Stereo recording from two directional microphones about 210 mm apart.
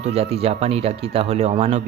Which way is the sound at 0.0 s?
30° right (ahead or behind).